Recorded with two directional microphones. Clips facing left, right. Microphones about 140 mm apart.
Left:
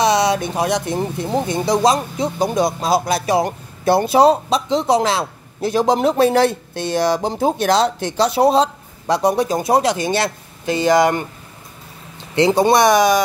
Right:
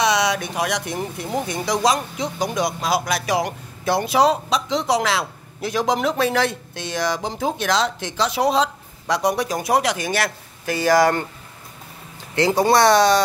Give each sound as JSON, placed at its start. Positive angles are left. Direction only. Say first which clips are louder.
{"t": 0.0, "sound": "a man's voice", "louder": "left 4 dB", "side_deg": 30}
{"t": 12.4, "sound": "speech", "louder": "left 3 dB", "side_deg": 20}